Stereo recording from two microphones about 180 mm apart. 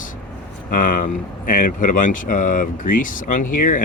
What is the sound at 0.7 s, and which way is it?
Speech, 50° left (ahead or behind).